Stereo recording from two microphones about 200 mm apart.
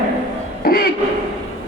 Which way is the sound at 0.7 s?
50° left (ahead or behind).